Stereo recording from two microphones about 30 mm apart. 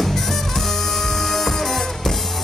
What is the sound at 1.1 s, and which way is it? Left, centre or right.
Music, centre.